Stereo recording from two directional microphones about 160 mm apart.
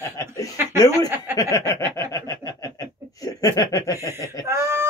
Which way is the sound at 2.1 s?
25° left (ahead or behind).